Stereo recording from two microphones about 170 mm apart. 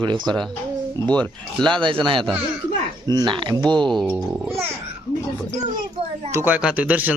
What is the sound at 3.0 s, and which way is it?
Speech, 25° right (ahead or behind).